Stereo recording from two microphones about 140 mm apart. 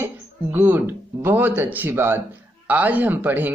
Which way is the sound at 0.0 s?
15° right (ahead or behind).